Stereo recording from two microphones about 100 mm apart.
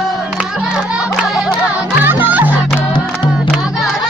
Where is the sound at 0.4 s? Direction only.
10° right (ahead or behind).